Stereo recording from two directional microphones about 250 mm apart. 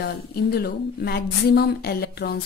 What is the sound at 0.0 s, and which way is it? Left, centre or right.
Speech, left.